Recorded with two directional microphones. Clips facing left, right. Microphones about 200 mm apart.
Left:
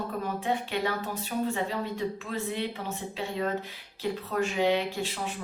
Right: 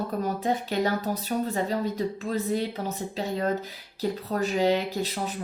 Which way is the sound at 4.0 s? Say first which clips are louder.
Right 2 dB; 40° right (ahead or behind).